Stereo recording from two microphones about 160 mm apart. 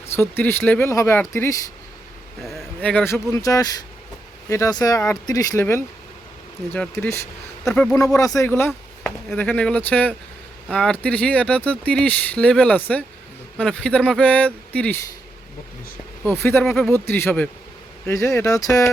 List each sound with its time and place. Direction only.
0.0 s speech: 15° left (ahead or behind)
2.4 s speech: centre (ahead or behind)
7.9 s speech: 20° left (ahead or behind)
16.2 s speech: 15° left (ahead or behind)
16.6 s speech: centre (ahead or behind)
16.9 s speech: 15° left (ahead or behind)